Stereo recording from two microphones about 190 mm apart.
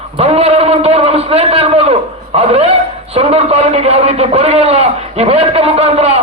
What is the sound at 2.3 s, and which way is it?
A man's voice, 35° right (ahead or behind).